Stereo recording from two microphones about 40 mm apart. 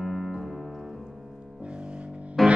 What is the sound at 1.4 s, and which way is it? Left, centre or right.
Music, right.